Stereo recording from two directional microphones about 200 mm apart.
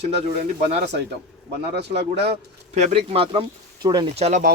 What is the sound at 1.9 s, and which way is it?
Speech, 55° right (ahead or behind).